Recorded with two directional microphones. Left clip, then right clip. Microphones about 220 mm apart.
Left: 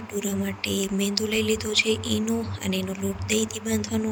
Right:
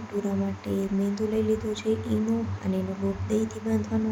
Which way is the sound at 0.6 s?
45° left (ahead or behind).